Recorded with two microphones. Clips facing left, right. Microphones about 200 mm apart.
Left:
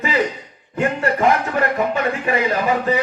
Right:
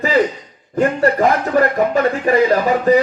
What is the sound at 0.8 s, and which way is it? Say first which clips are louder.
A man's voice: right 4 dB; 40° right (ahead or behind).